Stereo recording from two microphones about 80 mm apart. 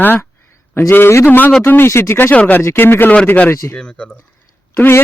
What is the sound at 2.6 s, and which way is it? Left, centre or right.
Speech, left.